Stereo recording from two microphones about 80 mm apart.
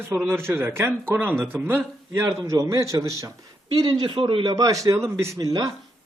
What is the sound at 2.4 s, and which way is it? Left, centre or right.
Speech, right.